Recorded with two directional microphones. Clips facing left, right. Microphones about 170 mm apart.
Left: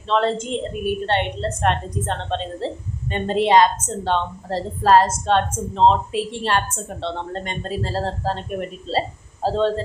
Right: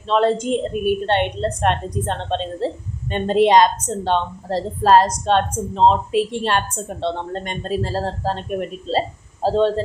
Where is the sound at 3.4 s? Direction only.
15° right (ahead or behind).